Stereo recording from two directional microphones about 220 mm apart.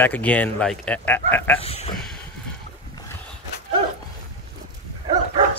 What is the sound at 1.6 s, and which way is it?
Speech, 25° left (ahead or behind).